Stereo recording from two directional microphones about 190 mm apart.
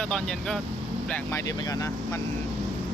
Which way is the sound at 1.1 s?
15° left (ahead or behind).